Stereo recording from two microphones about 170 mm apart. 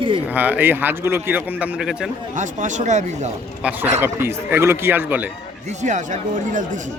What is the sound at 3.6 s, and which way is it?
Speech, 10° right (ahead or behind).